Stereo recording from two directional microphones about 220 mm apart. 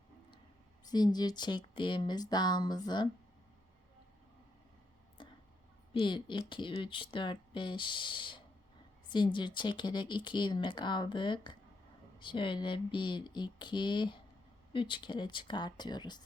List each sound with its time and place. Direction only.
0.9 s speech: 20° left (ahead or behind)
5.2 s a sound: 20° left (ahead or behind)
5.9 s speech: 20° left (ahead or behind)